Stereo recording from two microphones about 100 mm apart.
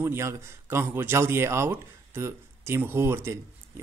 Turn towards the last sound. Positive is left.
turn(degrees=-25)  # may be behind; listen again after turning